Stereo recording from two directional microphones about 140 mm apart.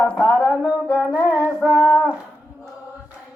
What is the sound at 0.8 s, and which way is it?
Singing, 15° left (ahead or behind).